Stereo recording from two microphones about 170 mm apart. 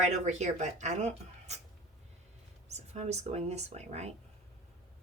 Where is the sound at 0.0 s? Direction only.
40° right (ahead or behind).